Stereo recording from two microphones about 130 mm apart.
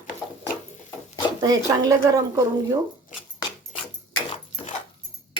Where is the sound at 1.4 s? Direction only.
25° right (ahead or behind).